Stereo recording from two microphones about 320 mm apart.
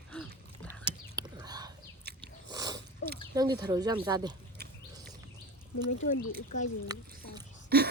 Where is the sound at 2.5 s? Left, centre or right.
Centre.